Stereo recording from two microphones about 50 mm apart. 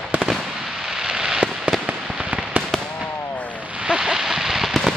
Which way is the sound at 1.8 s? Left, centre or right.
Right.